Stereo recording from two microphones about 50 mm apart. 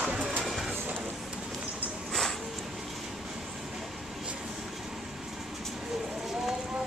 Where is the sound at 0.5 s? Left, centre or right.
Centre.